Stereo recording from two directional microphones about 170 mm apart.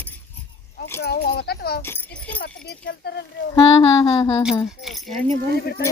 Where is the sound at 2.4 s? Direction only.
85° left.